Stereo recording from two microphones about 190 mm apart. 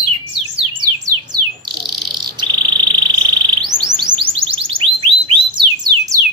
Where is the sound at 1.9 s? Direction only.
25° right (ahead or behind).